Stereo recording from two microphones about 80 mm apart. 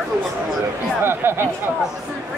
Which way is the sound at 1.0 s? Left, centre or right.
Right.